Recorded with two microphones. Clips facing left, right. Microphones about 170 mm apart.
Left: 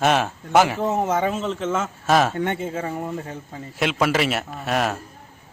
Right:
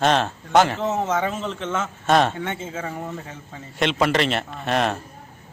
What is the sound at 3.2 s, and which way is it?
Speech, 35° left (ahead or behind).